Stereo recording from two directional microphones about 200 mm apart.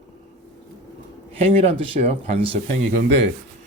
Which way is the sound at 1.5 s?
30° right (ahead or behind).